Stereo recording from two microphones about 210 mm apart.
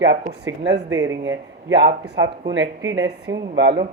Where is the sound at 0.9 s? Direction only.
15° right (ahead or behind).